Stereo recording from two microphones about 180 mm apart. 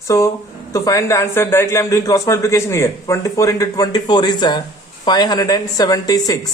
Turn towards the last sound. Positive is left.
turn(degrees=20)  # may be behind; listen again after turning